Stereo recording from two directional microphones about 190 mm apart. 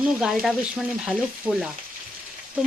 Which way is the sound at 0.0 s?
5° right (ahead or behind).